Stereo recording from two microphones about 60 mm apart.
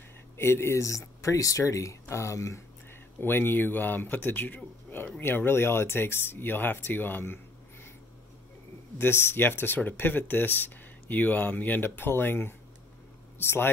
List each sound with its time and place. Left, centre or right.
0.4 s speech: left
2.9 s speech: left
9.0 s speech: left